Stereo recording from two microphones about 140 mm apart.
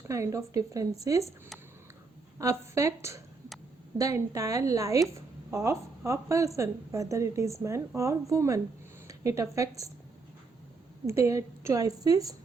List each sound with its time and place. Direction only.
0.1 s a woman's voice: 20° right (ahead or behind)
2.4 s a woman's voice: 20° right (ahead or behind)
11.0 s a woman's voice: 20° right (ahead or behind)